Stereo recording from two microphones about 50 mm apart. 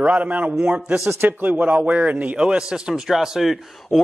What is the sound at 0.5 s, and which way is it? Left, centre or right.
Speech, centre.